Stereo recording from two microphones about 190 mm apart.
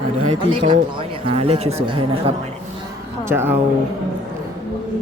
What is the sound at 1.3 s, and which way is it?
Speech, 30° right (ahead or behind).